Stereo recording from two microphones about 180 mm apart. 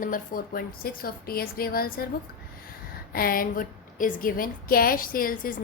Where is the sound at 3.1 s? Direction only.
55° left (ahead or behind).